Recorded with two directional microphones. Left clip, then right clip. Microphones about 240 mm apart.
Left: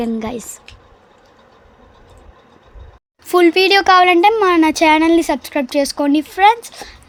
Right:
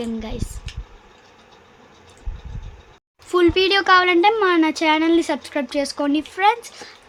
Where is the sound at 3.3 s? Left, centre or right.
Left.